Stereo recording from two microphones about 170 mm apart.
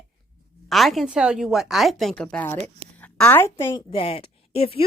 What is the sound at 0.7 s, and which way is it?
A woman's voice, centre (ahead or behind).